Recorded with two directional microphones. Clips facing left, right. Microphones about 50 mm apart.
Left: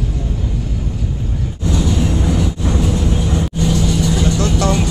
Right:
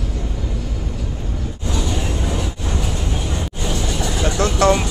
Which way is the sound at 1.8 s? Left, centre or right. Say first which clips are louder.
Left 5 dB; centre.